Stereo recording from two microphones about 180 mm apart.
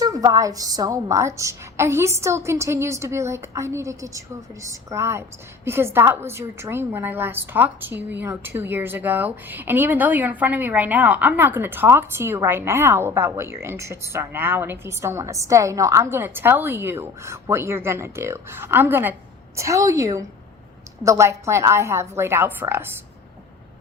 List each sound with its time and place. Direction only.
0.0 s a woman's voice: 20° right (ahead or behind)